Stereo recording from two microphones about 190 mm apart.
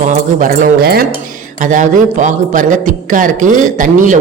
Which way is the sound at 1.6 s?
40° right (ahead or behind).